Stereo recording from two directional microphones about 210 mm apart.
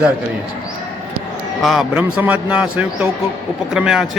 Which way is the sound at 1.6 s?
Centre (ahead or behind).